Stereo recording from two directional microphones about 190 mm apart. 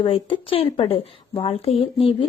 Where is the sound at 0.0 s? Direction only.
25° left (ahead or behind).